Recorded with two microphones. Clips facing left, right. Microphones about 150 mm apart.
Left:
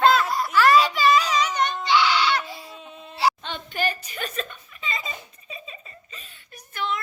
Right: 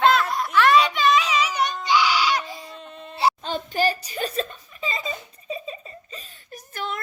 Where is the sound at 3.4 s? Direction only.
40° right (ahead or behind).